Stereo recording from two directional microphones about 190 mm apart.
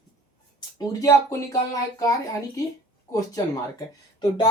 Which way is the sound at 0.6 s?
20° left (ahead or behind).